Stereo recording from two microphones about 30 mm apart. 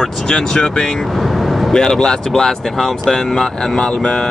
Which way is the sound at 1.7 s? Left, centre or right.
Left.